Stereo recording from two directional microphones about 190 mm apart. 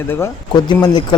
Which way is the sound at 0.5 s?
25° left (ahead or behind).